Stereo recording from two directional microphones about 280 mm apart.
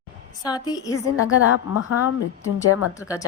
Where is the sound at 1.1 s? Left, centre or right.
Left.